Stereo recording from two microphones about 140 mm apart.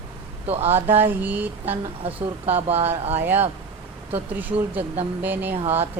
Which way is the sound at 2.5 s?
45° right (ahead or behind).